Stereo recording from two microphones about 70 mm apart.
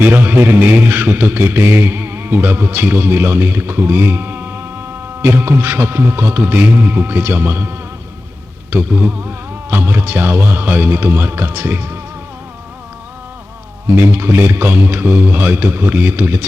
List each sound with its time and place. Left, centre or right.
0.0 s a man's voice: right
13.9 s a man's voice: right